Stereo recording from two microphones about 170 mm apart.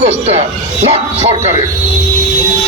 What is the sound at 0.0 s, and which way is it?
Speech, 40° right (ahead or behind).